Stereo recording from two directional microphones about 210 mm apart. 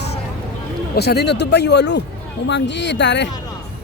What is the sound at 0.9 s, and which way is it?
Speech, 50° left (ahead or behind).